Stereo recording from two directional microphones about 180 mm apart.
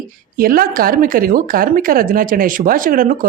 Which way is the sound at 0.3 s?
55° right (ahead or behind).